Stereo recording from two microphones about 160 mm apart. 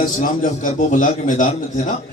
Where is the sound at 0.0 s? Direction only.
55° left (ahead or behind).